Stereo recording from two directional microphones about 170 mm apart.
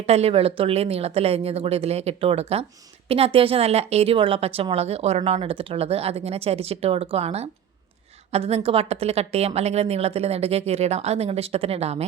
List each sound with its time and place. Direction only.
0.0 s a woman's voice: 40° right (ahead or behind)